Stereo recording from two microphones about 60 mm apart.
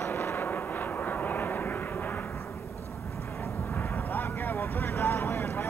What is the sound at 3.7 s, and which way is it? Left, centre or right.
Vehicle, left.